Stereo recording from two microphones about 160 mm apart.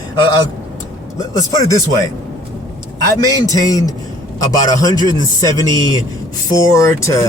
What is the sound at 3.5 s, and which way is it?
Speech, 20° left (ahead or behind).